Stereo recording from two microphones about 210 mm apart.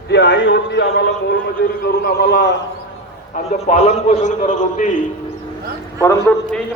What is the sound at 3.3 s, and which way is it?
A man's voice, 35° left (ahead or behind).